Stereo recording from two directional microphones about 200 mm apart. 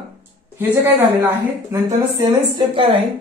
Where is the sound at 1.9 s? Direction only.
20° right (ahead or behind).